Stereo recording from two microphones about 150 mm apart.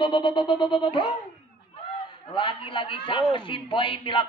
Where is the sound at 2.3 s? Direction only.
35° left (ahead or behind).